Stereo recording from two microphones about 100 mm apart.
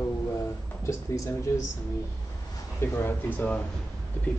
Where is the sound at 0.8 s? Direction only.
30° left (ahead or behind).